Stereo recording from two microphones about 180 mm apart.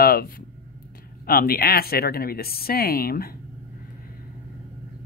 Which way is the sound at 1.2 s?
55° left (ahead or behind).